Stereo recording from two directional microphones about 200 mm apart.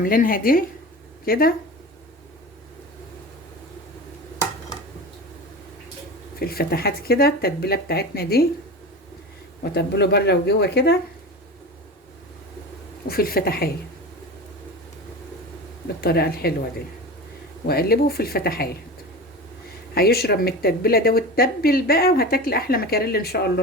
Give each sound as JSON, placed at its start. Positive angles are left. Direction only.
{"t": 0.0, "sound": "speech", "side_deg": 45}
{"t": 6.4, "sound": "speech", "side_deg": 50}
{"t": 9.7, "sound": "speech", "side_deg": 55}
{"t": 13.1, "sound": "speech", "side_deg": 50}
{"t": 16.0, "sound": "speech", "side_deg": 50}
{"t": 17.7, "sound": "speech", "side_deg": 50}
{"t": 19.9, "sound": "speech", "side_deg": 50}